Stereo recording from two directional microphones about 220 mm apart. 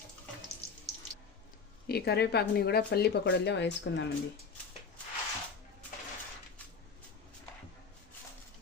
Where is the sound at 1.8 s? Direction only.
45° left (ahead or behind).